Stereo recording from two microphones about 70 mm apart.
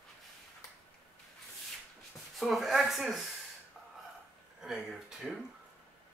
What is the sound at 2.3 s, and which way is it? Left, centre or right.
Speech, centre.